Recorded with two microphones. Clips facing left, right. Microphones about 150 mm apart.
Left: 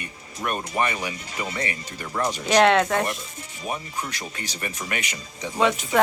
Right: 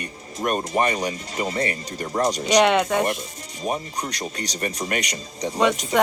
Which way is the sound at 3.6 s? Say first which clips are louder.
Right 4 dB; 35° right (ahead or behind).